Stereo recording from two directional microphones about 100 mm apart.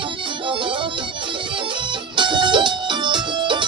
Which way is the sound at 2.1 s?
55° right (ahead or behind).